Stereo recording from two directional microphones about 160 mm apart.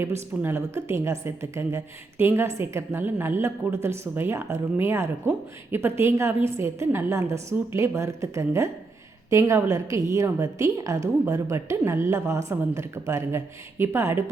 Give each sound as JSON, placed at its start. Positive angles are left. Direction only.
{"t": 0.4, "sound": "a woman's voice", "side_deg": -15}